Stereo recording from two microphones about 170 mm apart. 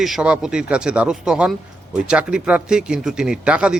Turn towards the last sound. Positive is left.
turn(degrees=-5)  # may be behind; listen again after turning